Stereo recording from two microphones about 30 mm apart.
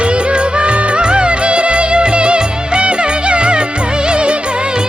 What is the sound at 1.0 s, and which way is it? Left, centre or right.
Music, right.